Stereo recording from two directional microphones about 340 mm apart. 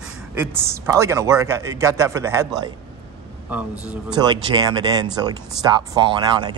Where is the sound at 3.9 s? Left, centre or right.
Centre.